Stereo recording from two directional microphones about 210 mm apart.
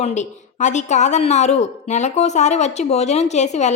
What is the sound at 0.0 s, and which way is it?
A woman's voice, 35° left (ahead or behind).